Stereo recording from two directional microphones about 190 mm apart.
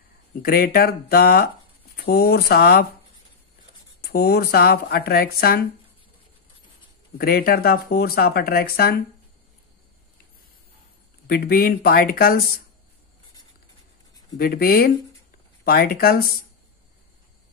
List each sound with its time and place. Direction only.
0.4 s speech: 55° left (ahead or behind)
4.0 s speech: 55° left (ahead or behind)
7.2 s speech: 50° left (ahead or behind)
11.2 s speech: 50° left (ahead or behind)
14.4 s speech: 50° left (ahead or behind)